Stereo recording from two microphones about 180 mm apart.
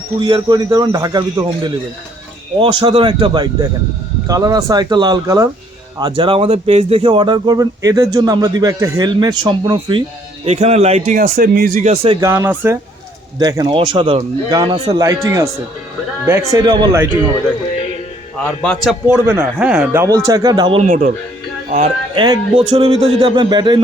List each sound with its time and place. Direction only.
0.2 s speech: 25° right (ahead or behind); by 11.9 s 45° right (ahead or behind)
12.2 s speech: 15° right (ahead or behind)
16.5 s speech: 20° right (ahead or behind)
18.3 s a man's voice: 5° left (ahead or behind)
19.0 s speech: 10° right (ahead or behind); by 20.8 s 25° right (ahead or behind)
20.8 s speech: 45° right (ahead or behind)
22.1 s speech: 25° right (ahead or behind)